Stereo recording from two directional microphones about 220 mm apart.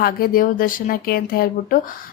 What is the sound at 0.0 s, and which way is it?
Speech, 40° left (ahead or behind).